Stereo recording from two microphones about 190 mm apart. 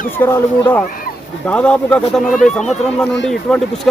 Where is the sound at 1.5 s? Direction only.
5° left (ahead or behind).